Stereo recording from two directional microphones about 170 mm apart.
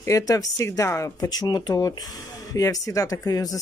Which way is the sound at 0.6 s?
20° left (ahead or behind).